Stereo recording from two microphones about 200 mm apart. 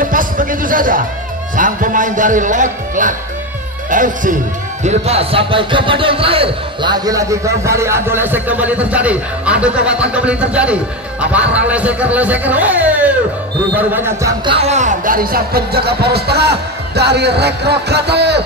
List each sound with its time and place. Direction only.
0.0 s music: 45° right (ahead or behind)
1.6 s a man's voice: 40° right (ahead or behind)
4.8 s speech: 30° right (ahead or behind); by 14.3 s 10° right (ahead or behind)
14.4 s speech: 30° right (ahead or behind); by 18.4 s 55° right (ahead or behind)